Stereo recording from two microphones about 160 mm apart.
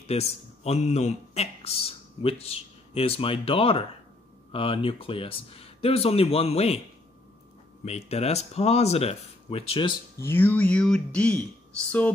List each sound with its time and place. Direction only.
0.0 s speech: 40° left (ahead or behind)
7.8 s speech: 40° left (ahead or behind)
10.2 s speech: 10° left (ahead or behind)